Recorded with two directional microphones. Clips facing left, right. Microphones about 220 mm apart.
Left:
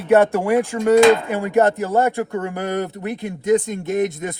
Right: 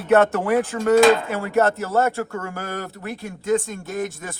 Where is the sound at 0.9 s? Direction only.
Centre (ahead or behind).